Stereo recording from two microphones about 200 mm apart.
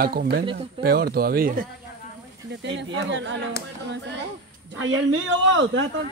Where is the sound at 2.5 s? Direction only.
60° right (ahead or behind).